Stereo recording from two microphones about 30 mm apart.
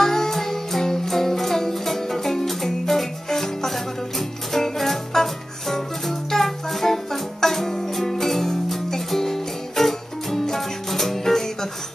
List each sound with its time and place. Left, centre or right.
0.0 s music: centre